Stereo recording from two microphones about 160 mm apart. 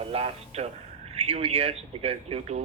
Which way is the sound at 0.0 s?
40° right (ahead or behind).